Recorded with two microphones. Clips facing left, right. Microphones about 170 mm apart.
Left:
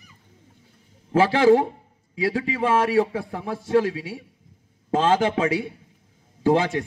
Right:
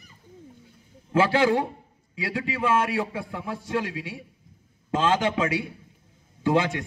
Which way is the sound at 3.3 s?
40° left (ahead or behind).